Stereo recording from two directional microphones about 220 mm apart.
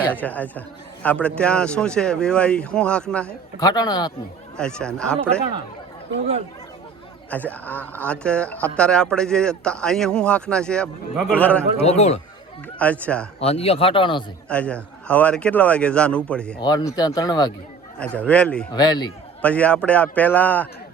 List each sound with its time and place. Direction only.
0.1 s a man's voice: 5° left (ahead or behind)
3.6 s a man's voice: 20° left (ahead or behind)
4.5 s speech: 5° left (ahead or behind)
7.3 s speech: 5° left (ahead or behind)
11.8 s a man's voice: 30° left (ahead or behind)
12.8 s a man's voice: 5° left (ahead or behind)
13.4 s a man's voice: 25° left (ahead or behind)
14.5 s speech: 5° left (ahead or behind)
16.6 s a man's voice: 15° left (ahead or behind)
18.3 s speech: 5° left (ahead or behind)
18.7 s a man's voice: 20° left (ahead or behind)
19.4 s a man's voice: 5° left (ahead or behind)